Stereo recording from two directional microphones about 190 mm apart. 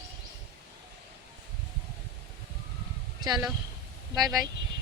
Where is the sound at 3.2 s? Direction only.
20° right (ahead or behind).